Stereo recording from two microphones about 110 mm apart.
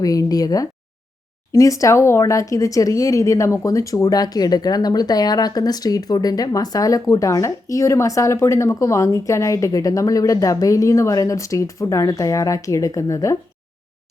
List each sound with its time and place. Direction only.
0.0 s speech: 30° left (ahead or behind)